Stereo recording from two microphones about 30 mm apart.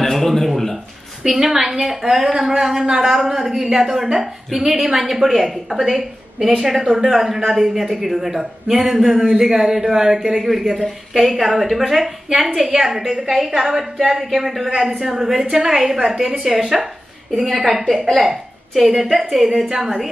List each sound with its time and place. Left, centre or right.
0.0 s a sound: centre
1.2 s a woman's voice: centre
10.6 s speech: centre
12.5 s a woman's voice: centre
13.3 s speech: centre
14.7 s a woman's voice: centre
19.7 s a woman's voice: centre